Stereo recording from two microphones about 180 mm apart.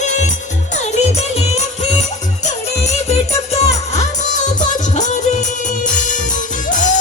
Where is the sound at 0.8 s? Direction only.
35° left (ahead or behind).